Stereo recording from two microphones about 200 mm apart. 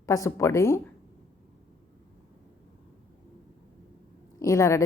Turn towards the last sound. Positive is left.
turn(degrees=15)  # may be behind; listen again after turning